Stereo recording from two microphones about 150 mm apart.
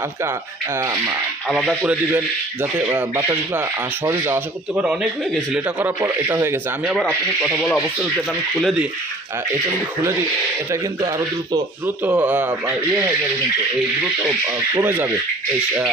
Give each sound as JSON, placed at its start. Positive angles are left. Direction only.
{"t": 0.7, "sound": "speech", "side_deg": -20}
{"t": 1.5, "sound": "speech", "side_deg": 0}
{"t": 1.9, "sound": "a man's voice", "side_deg": -10}
{"t": 7.0, "sound": "speech", "side_deg": 5}
{"t": 10.7, "sound": "speech", "side_deg": -25}
{"t": 11.8, "sound": "a man's voice", "side_deg": -10}
{"t": 14.8, "sound": "a man's voice", "side_deg": -15}